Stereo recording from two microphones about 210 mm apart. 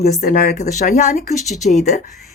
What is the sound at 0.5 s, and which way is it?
Speech, 35° left (ahead or behind).